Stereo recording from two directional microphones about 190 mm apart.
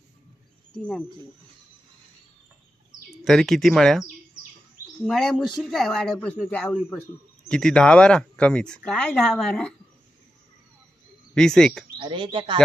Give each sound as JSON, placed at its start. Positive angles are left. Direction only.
{"t": 0.8, "sound": "speech", "side_deg": 5}
{"t": 3.1, "sound": "speech", "side_deg": 0}
{"t": 5.0, "sound": "speech", "side_deg": 0}
{"t": 11.3, "sound": "speech", "side_deg": 5}
{"t": 11.9, "sound": "speech", "side_deg": -25}